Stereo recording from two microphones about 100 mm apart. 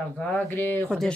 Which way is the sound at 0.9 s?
5° left (ahead or behind).